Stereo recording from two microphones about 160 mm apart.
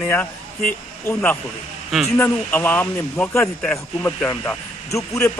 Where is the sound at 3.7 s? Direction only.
15° left (ahead or behind).